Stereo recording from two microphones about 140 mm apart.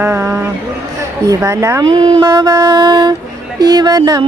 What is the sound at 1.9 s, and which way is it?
Mantra, 35° right (ahead or behind).